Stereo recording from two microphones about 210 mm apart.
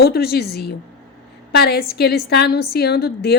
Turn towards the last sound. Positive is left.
turn(degrees=50)  # may be behind; listen again after turning